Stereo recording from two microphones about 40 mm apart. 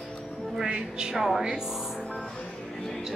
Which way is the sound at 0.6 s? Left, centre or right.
Right.